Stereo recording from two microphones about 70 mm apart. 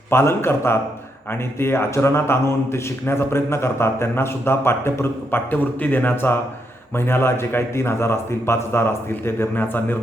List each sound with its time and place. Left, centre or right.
0.1 s a man's voice: left